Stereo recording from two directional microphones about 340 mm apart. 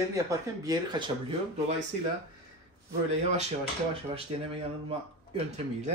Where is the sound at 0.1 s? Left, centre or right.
Centre.